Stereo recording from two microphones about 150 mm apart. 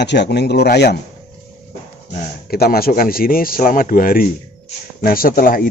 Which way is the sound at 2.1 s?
75° left (ahead or behind).